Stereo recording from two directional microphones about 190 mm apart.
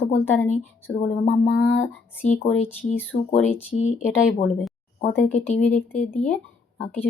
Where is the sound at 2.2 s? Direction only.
35° left (ahead or behind).